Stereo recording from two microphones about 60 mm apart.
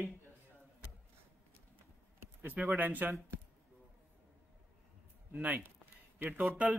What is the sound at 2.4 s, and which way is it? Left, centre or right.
Speech, right.